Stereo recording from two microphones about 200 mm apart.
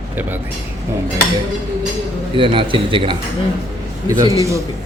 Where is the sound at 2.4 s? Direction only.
25° right (ahead or behind).